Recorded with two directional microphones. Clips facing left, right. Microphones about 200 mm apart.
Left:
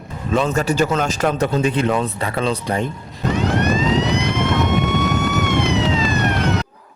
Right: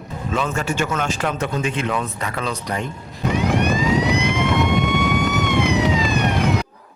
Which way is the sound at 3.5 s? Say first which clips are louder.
Left 1 dB; 10° right (ahead or behind).